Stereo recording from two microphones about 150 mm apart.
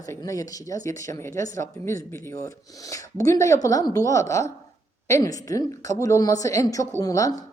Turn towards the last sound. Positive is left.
turn(degrees=25)  # may be behind; listen again after turning